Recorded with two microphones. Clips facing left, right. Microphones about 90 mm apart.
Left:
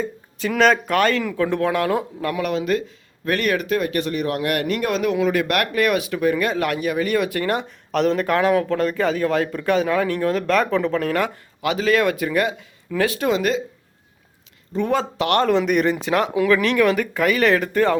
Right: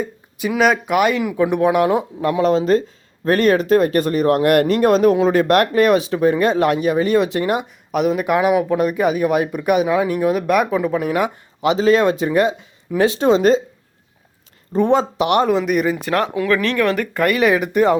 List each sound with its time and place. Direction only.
0.0 s speech: 10° right (ahead or behind); by 13.6 s 30° right (ahead or behind)
14.8 s speech: 20° right (ahead or behind)